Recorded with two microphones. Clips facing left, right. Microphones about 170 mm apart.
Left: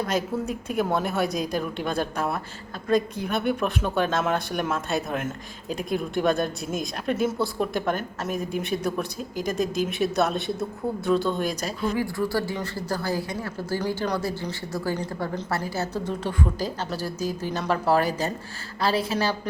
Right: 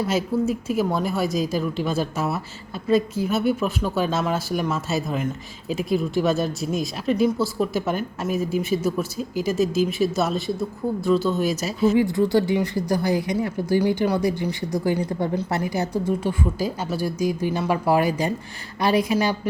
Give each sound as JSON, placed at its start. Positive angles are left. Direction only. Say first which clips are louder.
{"t": 0.0, "sound": "speech", "louder": "right 4 dB", "side_deg": -5}
{"t": 11.9, "sound": "speech", "louder": "right 6 dB", "side_deg": -20}